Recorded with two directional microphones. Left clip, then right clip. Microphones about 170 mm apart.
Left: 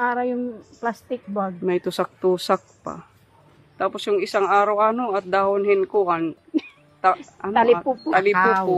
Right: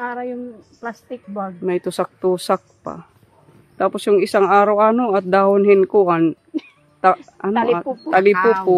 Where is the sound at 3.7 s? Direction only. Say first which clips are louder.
Right 6 dB; 45° right (ahead or behind).